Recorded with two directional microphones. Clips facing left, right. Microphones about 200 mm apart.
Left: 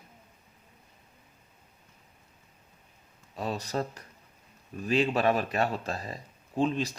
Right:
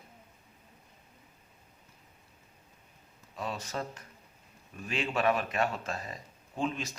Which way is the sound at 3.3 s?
35° left (ahead or behind).